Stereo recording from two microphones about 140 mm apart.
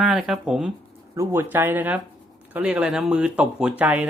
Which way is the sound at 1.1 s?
15° right (ahead or behind).